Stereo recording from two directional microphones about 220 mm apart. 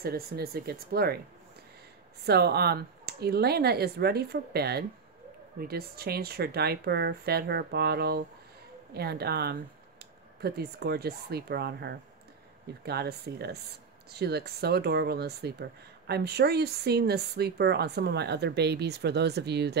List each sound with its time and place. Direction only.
0.0 s a woman's voice: 45° right (ahead or behind)
2.2 s a woman's voice: 45° right (ahead or behind)